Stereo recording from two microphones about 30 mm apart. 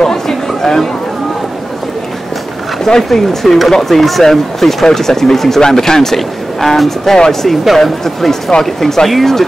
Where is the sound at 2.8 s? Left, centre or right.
Centre.